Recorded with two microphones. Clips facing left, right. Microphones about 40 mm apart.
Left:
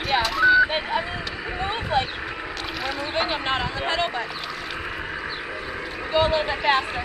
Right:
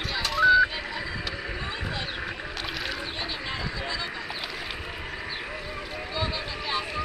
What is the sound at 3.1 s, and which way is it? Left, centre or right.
Speech, left.